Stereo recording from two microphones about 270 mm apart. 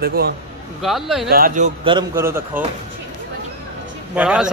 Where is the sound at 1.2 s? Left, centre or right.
Right; by 2.6 s centre.